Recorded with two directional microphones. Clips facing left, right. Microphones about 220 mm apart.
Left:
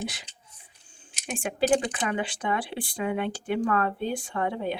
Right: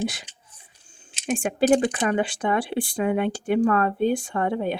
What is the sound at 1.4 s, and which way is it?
Speech, 50° right (ahead or behind).